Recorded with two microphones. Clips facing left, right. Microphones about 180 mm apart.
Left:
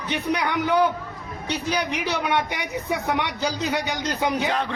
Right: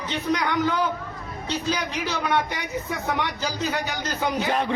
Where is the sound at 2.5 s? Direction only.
70° left (ahead or behind).